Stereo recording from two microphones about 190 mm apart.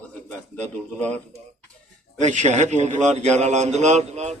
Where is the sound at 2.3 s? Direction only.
40° right (ahead or behind).